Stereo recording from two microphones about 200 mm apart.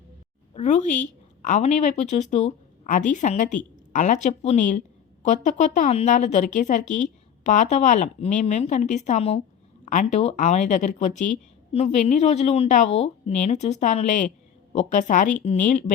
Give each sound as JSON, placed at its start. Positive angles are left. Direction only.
{"t": 0.5, "sound": "a woman's voice", "side_deg": 35}